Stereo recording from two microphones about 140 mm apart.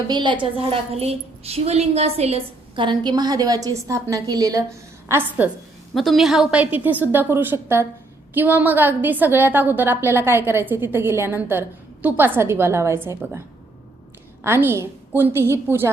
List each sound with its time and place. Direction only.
0.1 s a woman's voice: 35° right (ahead or behind)
0.5 s a woman's voice: 45° right (ahead or behind); by 5.5 s 15° right (ahead or behind)
5.9 s a woman's voice: centre (ahead or behind); by 13.4 s 20° right (ahead or behind)
14.4 s a woman's voice: 15° right (ahead or behind)